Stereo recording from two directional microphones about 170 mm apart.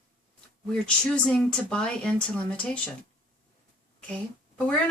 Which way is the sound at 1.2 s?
5° left (ahead or behind).